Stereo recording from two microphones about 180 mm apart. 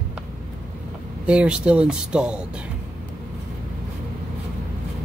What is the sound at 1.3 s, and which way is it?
Speech, 5° right (ahead or behind).